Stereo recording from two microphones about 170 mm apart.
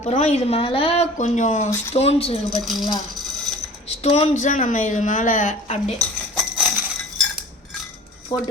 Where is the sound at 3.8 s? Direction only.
40° left (ahead or behind).